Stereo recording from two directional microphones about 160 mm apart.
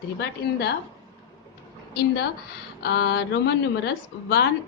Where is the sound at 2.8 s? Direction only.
90° left.